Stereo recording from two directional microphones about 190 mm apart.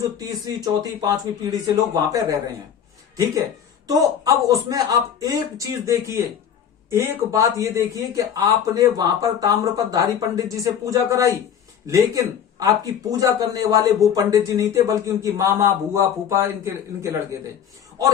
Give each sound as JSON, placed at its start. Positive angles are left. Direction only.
{"t": 0.0, "sound": "speech", "side_deg": -20}
{"t": 3.8, "sound": "a man's voice", "side_deg": -20}
{"t": 6.9, "sound": "a man's voice", "side_deg": -15}